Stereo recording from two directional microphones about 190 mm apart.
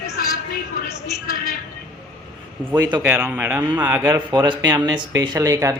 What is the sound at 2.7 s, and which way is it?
Speech, 20° right (ahead or behind).